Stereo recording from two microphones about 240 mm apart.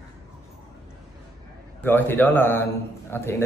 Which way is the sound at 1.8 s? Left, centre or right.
Centre.